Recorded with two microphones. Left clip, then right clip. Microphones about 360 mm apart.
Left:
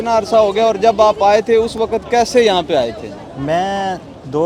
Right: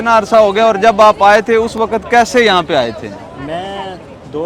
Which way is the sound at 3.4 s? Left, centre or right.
Left.